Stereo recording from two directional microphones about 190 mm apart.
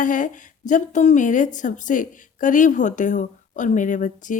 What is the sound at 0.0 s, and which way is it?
A woman's voice, 45° left (ahead or behind).